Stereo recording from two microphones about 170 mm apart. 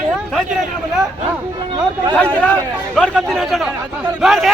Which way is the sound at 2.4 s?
10° left (ahead or behind).